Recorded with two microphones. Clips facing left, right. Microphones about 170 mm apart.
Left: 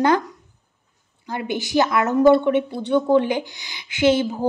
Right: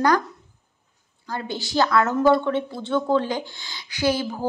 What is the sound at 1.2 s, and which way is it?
A woman's voice, 20° left (ahead or behind).